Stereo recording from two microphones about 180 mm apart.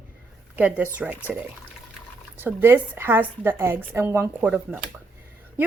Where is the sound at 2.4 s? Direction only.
10° right (ahead or behind).